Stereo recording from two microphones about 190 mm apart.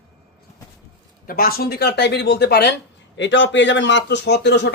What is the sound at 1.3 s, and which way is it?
Speech, 50° left (ahead or behind).